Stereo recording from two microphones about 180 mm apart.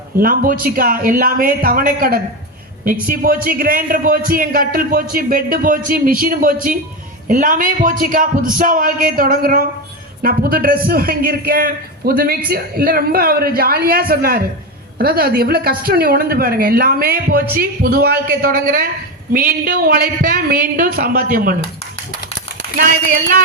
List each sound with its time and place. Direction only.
0.2 s a man's voice: 50° right (ahead or behind)